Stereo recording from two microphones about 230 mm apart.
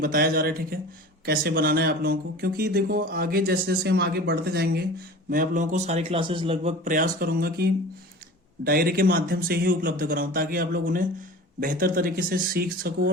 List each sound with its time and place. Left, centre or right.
0.0 s a man's voice: right